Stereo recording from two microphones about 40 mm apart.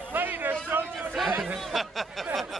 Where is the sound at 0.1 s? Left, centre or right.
Right.